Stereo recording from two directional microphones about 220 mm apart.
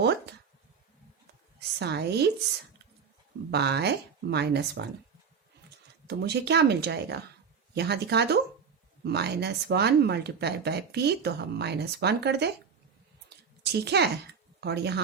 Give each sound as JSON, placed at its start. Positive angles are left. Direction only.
{"t": 0.0, "sound": "a sound", "side_deg": -50}
{"t": 1.8, "sound": "speech", "side_deg": -50}
{"t": 3.5, "sound": "speech", "side_deg": -50}
{"t": 6.1, "sound": "speech", "side_deg": -50}
{"t": 13.3, "sound": "a sound", "side_deg": -50}
{"t": 14.6, "sound": "speech", "side_deg": -50}